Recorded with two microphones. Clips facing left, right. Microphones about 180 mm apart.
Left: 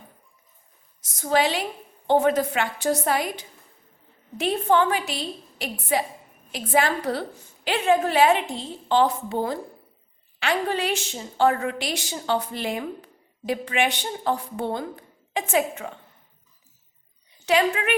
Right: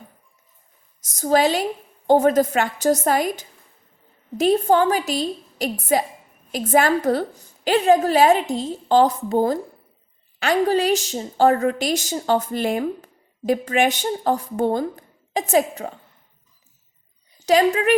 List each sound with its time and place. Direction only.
1.0 s a woman's voice: 40° right (ahead or behind)
17.4 s a woman's voice: 40° right (ahead or behind)